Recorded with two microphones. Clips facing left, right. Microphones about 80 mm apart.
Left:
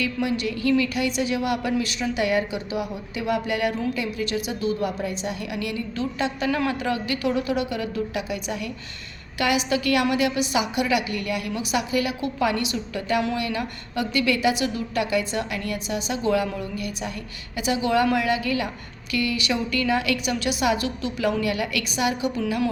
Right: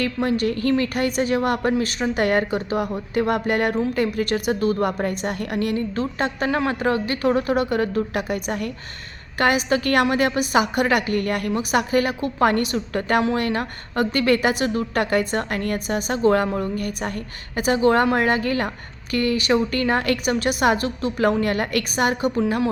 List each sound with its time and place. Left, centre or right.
0.0 s a woman's voice: right
22.4 s a woman's voice: right